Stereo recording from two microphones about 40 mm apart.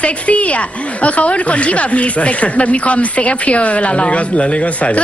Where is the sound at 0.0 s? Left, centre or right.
Left.